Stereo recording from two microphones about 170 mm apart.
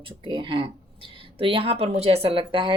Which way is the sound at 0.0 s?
30° right (ahead or behind).